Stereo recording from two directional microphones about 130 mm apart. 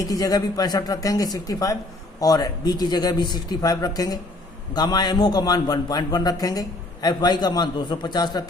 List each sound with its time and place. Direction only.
0.0 s a man's voice: 30° left (ahead or behind)